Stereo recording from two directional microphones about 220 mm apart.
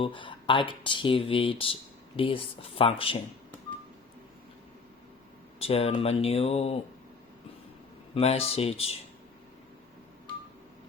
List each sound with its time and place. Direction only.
0.0 s speech: 20° left (ahead or behind)
5.5 s speech: 25° left (ahead or behind)
8.1 s speech: 25° left (ahead or behind)